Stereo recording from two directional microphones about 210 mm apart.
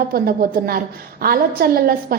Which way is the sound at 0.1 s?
45° right (ahead or behind).